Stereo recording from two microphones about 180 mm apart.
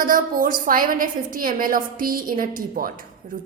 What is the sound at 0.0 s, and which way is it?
A woman's voice, 50° right (ahead or behind).